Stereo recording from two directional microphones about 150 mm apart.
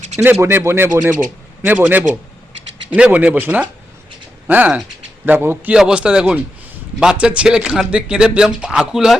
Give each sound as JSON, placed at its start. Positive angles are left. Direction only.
{"t": 0.2, "sound": "speech", "side_deg": -15}